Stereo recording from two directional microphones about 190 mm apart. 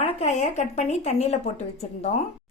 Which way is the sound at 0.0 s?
35° left (ahead or behind).